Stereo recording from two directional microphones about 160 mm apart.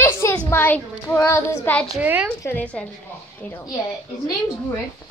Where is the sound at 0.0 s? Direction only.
15° left (ahead or behind).